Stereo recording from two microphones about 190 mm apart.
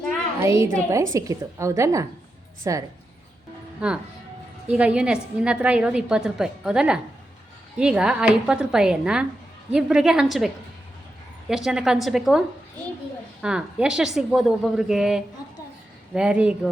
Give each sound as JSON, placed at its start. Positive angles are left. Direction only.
{"t": 0.3, "sound": "a woman's voice", "side_deg": -15}
{"t": 3.8, "sound": "a woman's voice", "side_deg": -5}
{"t": 13.4, "sound": "a woman's voice", "side_deg": -5}